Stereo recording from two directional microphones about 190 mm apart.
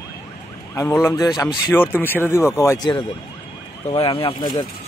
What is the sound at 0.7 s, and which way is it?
Speech, 15° left (ahead or behind).